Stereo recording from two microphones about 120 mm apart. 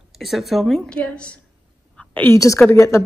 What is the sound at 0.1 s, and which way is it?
A woman's voice, centre (ahead or behind).